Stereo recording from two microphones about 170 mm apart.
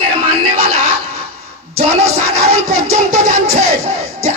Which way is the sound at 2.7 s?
40° right (ahead or behind).